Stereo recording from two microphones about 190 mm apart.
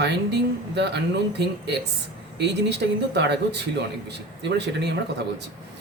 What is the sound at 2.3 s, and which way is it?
Speech, 60° right (ahead or behind).